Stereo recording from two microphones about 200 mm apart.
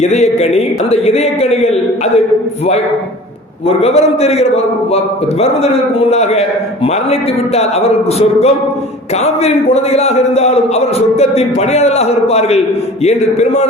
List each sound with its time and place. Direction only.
0.0 s a man's voice: 35° left (ahead or behind)
3.7 s a man's voice: 30° left (ahead or behind)